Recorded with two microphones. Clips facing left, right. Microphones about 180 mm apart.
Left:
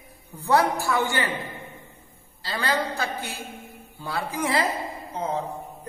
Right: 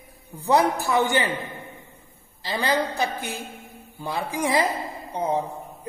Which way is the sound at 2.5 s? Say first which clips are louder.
Right 2 dB; 20° right (ahead or behind).